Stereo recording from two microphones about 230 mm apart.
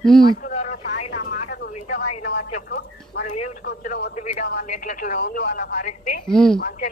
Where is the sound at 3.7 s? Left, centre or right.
Left.